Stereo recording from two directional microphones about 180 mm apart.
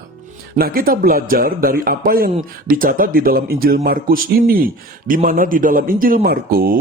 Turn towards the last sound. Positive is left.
turn(degrees=-55)  # may be behind; listen again after turning